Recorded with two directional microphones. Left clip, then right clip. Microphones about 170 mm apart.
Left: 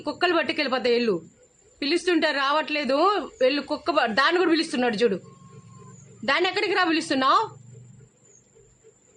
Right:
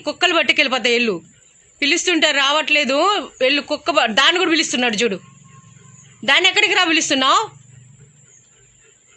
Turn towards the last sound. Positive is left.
turn(degrees=-10)  # may be behind; listen again after turning